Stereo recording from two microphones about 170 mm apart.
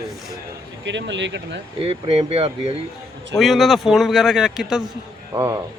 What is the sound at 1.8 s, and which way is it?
Speech, 35° right (ahead or behind).